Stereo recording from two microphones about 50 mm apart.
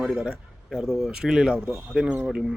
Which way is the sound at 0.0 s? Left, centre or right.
Centre.